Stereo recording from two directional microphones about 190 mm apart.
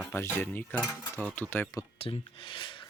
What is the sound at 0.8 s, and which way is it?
Cutlery, 10° right (ahead or behind).